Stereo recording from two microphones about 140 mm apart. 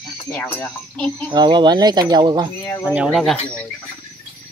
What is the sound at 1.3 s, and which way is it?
Speech, 30° right (ahead or behind).